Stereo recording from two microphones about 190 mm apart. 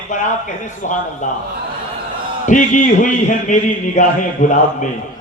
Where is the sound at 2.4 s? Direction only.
40° left (ahead or behind).